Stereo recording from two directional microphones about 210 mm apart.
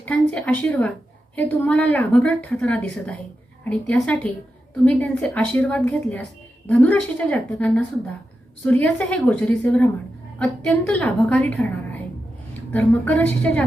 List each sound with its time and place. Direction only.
0.0 s a woman's voice: 5° left (ahead or behind)